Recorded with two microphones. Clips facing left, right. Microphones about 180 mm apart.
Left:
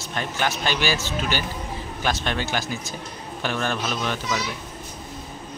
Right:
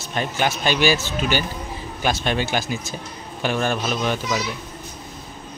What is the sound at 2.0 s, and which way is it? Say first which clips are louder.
A man's voice: right 4 dB; 15° right (ahead or behind).